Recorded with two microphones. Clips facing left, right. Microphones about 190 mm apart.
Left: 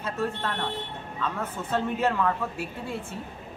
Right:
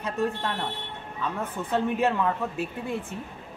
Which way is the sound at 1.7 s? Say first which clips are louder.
Right 1 dB; 15° right (ahead or behind).